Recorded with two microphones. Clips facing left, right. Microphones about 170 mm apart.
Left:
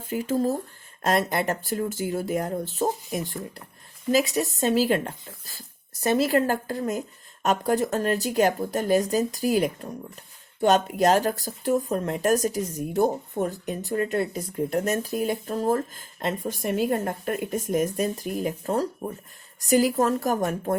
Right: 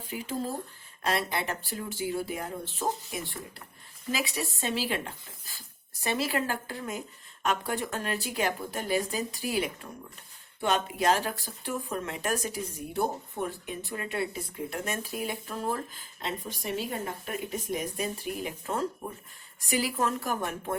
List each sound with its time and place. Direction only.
0.0 s speech: 45° left (ahead or behind)